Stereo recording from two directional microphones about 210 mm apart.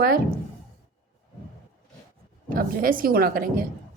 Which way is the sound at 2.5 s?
45° right (ahead or behind).